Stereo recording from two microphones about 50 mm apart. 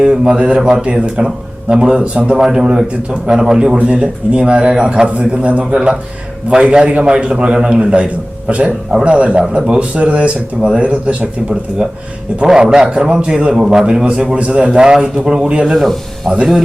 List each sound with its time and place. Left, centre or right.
0.0 s a man's voice: right
5.7 s a man's voice: centre
12.5 s a man's voice: centre
14.3 s speech: right
15.6 s speech: centre
16.3 s a man's voice: centre